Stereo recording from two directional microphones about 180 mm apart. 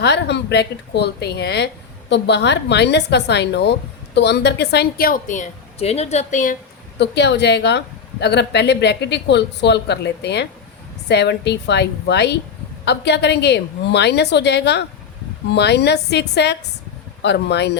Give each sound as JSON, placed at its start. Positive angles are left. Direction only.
{"t": 0.0, "sound": "a woman's voice", "side_deg": 70}
{"t": 7.0, "sound": "a woman's voice", "side_deg": 70}